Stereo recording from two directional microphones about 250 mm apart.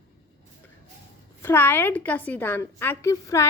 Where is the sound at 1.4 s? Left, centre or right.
Centre.